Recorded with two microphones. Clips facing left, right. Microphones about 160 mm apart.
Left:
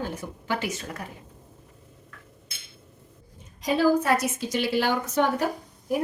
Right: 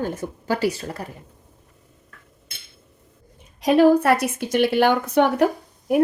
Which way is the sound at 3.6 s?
65° right (ahead or behind).